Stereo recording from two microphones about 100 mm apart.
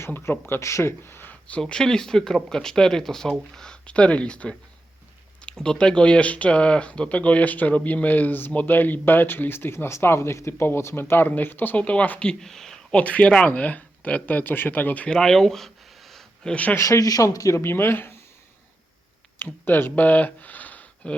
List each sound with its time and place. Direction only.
0.0 s speech: 25° left (ahead or behind)
16.7 s speech: 30° left (ahead or behind)
19.6 s speech: 20° left (ahead or behind)